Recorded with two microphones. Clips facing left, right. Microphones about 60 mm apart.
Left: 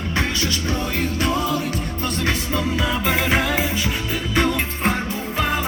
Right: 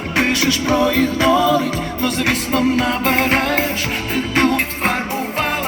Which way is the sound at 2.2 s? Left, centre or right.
Right.